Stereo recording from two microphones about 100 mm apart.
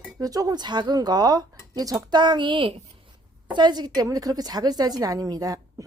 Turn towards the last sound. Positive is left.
turn(degrees=-35)  # may be behind; listen again after turning